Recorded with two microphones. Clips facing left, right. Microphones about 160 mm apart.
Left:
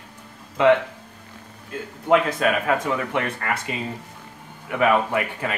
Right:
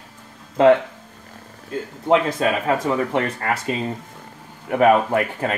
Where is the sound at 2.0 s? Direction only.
30° right (ahead or behind).